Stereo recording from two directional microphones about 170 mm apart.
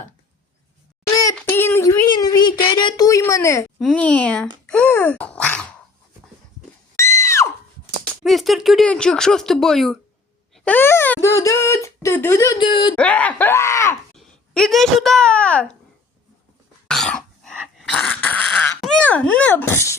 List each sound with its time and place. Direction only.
1.4 s a sound: 10° left (ahead or behind)
3.8 s speech: 5° left (ahead or behind)
4.6 s a sound: 5° left (ahead or behind)
6.9 s screaming: 15° left (ahead or behind)
8.2 s speech: centre (ahead or behind); by 12.9 s 30° left (ahead or behind)
13.0 s speech: 5° left (ahead or behind)
14.2 s a woman's voice: centre (ahead or behind)
16.9 s cough: 5° left (ahead or behind)